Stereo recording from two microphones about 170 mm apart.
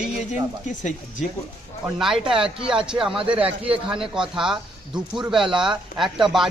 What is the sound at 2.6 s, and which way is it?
A man's voice, 5° right (ahead or behind).